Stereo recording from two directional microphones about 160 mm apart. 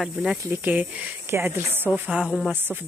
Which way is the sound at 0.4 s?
15° right (ahead or behind).